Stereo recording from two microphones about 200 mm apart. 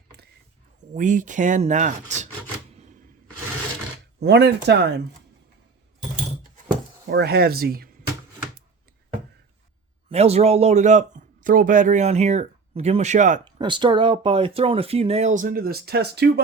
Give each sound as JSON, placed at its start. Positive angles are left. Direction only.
{"t": 0.9, "sound": "speech", "side_deg": -40}
{"t": 4.2, "sound": "speech", "side_deg": -55}
{"t": 7.1, "sound": "speech", "side_deg": -55}
{"t": 10.1, "sound": "speech", "side_deg": -30}
{"t": 13.4, "sound": "speech", "side_deg": -25}